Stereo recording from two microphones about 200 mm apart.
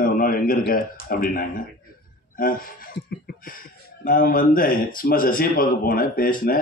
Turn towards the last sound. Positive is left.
turn(degrees=45)  # may be behind; listen again after turning